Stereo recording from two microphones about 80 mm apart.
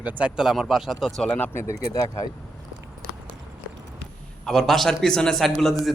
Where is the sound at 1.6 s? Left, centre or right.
Left.